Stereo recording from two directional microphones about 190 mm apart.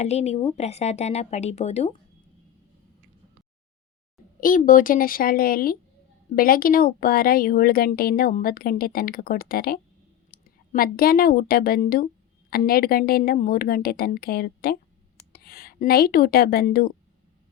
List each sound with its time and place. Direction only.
0.0 s speech: 35° left (ahead or behind)
4.4 s a woman's voice: 45° left (ahead or behind)